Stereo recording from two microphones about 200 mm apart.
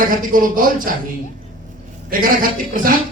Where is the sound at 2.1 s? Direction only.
45° right (ahead or behind).